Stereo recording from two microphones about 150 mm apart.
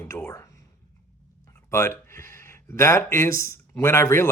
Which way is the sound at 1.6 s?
15° left (ahead or behind).